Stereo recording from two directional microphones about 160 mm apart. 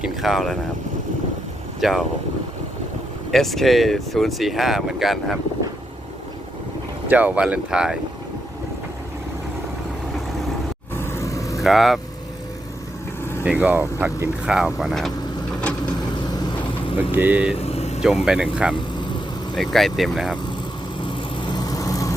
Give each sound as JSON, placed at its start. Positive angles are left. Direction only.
{"t": 0.0, "sound": "speech", "side_deg": 0}
{"t": 1.8, "sound": "speech", "side_deg": 0}
{"t": 3.3, "sound": "speech", "side_deg": 0}
{"t": 7.1, "sound": "speech", "side_deg": -10}
{"t": 10.9, "sound": "vehicle", "side_deg": 15}
{"t": 11.6, "sound": "speech", "side_deg": 0}
{"t": 13.4, "sound": "speech", "side_deg": -10}
{"t": 17.0, "sound": "speech", "side_deg": -10}
{"t": 17.6, "sound": "vehicle", "side_deg": 40}
{"t": 18.3, "sound": "speech", "side_deg": -5}
{"t": 21.1, "sound": "vehicle", "side_deg": 30}